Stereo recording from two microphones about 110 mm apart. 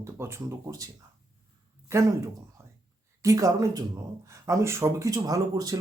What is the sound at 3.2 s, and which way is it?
Speech, 30° right (ahead or behind).